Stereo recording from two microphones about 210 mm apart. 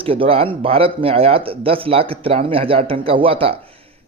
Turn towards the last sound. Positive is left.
turn(degrees=-25)  # may be behind; listen again after turning